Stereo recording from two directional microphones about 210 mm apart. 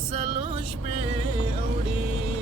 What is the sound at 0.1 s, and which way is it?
Music, 25° right (ahead or behind).